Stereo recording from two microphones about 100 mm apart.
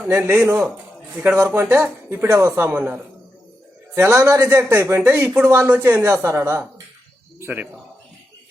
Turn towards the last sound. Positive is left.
turn(degrees=-20)  # may be behind; listen again after turning